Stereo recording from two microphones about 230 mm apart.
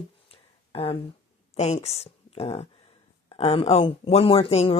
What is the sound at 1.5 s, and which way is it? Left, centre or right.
Speech, left.